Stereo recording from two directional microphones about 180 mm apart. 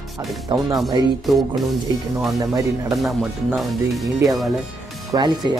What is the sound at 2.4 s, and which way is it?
Speech, 20° right (ahead or behind).